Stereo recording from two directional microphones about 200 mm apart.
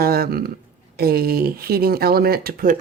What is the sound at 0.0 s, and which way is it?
Speech, 50° right (ahead or behind).